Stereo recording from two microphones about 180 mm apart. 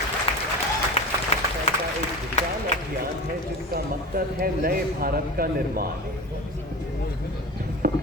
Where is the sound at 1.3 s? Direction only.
35° left (ahead or behind).